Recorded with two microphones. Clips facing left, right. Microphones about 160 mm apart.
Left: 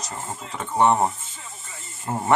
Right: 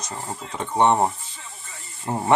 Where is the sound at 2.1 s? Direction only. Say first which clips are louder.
Right 1 dB; 15° right (ahead or behind).